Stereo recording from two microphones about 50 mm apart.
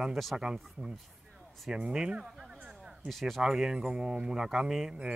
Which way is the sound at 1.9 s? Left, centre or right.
Centre.